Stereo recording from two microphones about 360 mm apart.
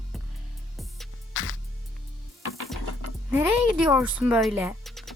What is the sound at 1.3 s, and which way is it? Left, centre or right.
Music, left.